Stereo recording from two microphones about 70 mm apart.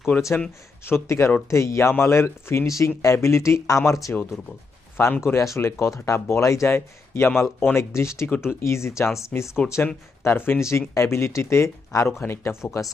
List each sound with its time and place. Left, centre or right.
0.1 s speech: centre
0.9 s speech: left
5.2 s speech: left
10.2 s speech: left
10.6 s speech: left
12.8 s speech: left